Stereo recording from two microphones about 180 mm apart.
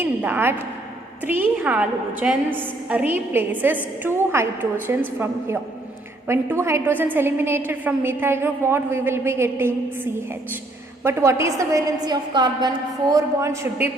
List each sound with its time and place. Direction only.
0.0 s a woman's voice: 10° right (ahead or behind)